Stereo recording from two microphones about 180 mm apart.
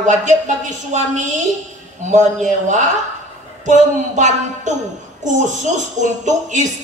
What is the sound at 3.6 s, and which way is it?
Music, 40° right (ahead or behind).